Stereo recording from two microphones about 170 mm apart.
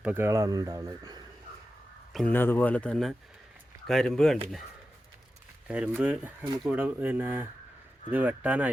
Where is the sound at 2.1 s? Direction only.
Centre (ahead or behind).